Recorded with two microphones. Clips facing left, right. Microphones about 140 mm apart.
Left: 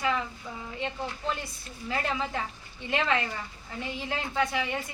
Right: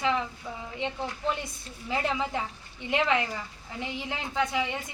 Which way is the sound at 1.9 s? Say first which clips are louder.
Right 2 dB; 15° right (ahead or behind).